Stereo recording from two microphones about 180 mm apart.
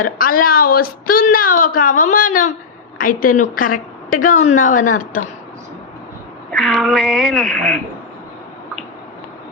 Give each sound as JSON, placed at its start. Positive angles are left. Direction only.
{"t": 0.0, "sound": "a woman's voice", "side_deg": 50}
{"t": 6.5, "sound": "speech", "side_deg": 0}